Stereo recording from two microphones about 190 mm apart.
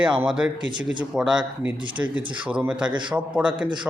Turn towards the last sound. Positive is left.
turn(degrees=-5)  # may be behind; listen again after turning